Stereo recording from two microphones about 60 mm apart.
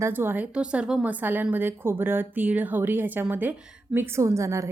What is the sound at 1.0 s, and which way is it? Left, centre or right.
A woman's voice, right.